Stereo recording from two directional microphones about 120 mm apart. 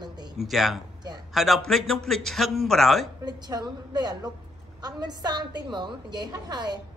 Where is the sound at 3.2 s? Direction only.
35° right (ahead or behind).